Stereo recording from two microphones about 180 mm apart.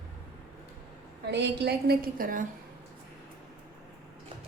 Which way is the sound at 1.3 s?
70° right (ahead or behind).